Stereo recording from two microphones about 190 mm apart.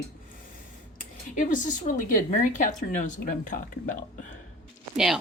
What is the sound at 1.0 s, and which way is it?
Speech, 40° left (ahead or behind).